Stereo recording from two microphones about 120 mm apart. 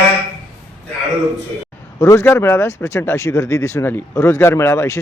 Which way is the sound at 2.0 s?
25° left (ahead or behind).